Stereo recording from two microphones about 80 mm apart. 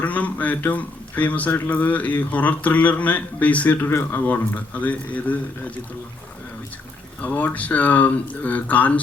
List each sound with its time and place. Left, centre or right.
0.0 s speech: centre
3.8 s speech: left
4.3 s speech: left
7.2 s speech: centre